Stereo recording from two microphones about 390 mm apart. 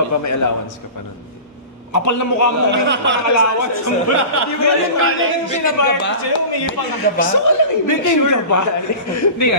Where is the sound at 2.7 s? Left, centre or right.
Right.